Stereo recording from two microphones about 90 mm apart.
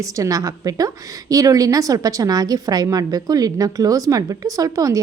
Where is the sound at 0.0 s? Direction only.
40° right (ahead or behind).